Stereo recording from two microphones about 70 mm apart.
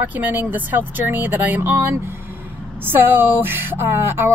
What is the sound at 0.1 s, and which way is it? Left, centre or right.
Speech, right.